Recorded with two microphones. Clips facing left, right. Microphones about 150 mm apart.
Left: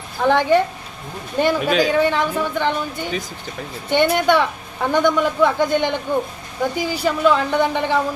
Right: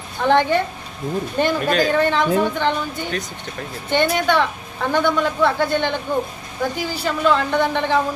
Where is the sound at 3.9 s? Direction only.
10° left (ahead or behind).